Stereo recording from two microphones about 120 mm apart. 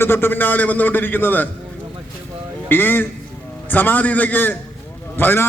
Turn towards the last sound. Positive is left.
turn(degrees=15)  # may be behind; listen again after turning